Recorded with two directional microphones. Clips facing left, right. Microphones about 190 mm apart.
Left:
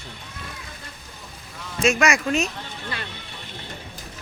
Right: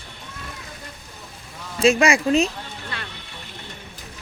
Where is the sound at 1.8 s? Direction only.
30° right (ahead or behind).